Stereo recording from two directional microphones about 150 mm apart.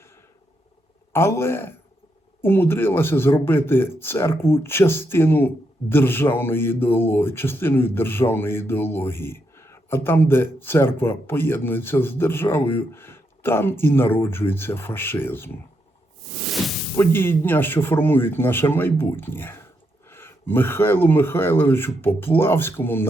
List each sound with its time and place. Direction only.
1.1 s speech: 15° left (ahead or behind)
16.2 s a sound: centre (ahead or behind)
17.0 s speech: 15° left (ahead or behind)